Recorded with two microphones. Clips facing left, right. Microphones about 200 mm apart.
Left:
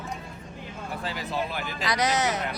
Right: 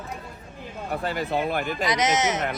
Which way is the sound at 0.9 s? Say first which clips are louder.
Right 6 dB; 55° right (ahead or behind).